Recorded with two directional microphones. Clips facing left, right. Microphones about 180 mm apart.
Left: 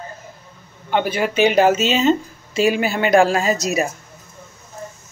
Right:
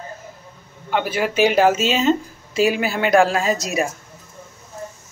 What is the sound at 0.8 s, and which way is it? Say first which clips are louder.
Speech: left 2 dB; centre (ahead or behind).